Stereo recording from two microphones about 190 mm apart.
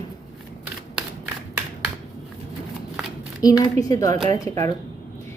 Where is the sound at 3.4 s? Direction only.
15° left (ahead or behind).